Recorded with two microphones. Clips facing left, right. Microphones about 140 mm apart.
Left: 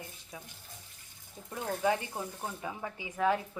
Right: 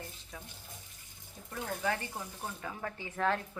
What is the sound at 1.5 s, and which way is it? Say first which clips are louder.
A woman's voice: left 4 dB; 15° left (ahead or behind).